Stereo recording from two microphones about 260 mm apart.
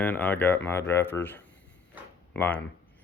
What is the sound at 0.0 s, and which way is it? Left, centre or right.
Speech, centre.